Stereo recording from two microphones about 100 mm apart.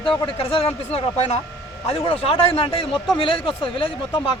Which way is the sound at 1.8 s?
75° left (ahead or behind).